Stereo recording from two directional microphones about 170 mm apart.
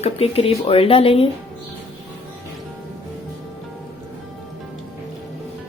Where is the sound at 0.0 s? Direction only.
35° left (ahead or behind).